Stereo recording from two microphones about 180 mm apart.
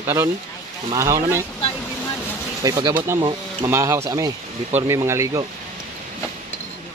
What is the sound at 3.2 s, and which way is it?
Speech, 30° right (ahead or behind).